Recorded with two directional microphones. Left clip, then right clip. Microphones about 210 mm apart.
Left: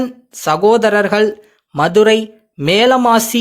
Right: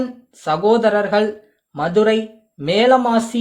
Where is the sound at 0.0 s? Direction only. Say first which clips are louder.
Left 5 dB; 30° left (ahead or behind).